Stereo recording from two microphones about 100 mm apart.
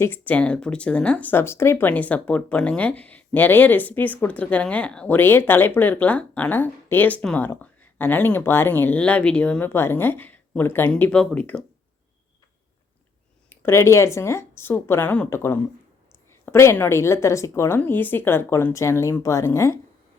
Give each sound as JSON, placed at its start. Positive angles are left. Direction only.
{"t": 0.0, "sound": "speech", "side_deg": 20}
{"t": 13.5, "sound": "speech", "side_deg": 25}